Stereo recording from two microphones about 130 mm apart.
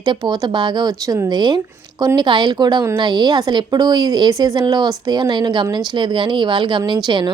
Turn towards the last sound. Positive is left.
turn(degrees=-35)  # may be behind; listen again after turning